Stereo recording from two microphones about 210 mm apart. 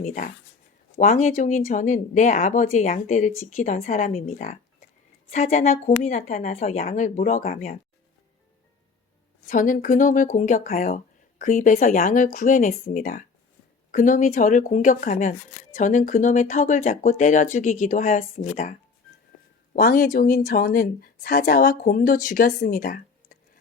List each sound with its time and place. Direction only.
0.0 s speech: 35° left (ahead or behind)
9.5 s speech: 40° left (ahead or behind)
19.7 s speech: 45° left (ahead or behind)